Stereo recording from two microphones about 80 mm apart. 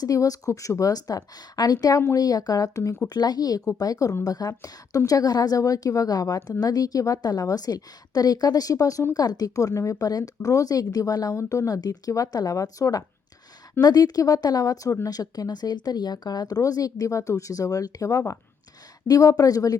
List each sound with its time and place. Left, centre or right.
0.0 s speech: left